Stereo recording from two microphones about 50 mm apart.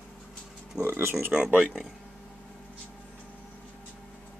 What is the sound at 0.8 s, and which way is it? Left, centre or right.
Speech, right.